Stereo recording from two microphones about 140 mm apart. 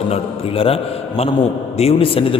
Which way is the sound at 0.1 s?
40° left (ahead or behind).